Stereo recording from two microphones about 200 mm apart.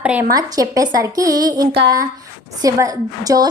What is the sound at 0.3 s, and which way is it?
A woman's voice, 20° right (ahead or behind).